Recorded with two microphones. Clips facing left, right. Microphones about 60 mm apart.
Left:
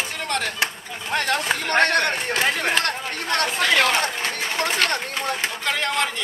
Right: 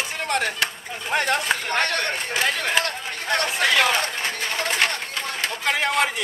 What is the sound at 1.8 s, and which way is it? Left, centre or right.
Speech, left.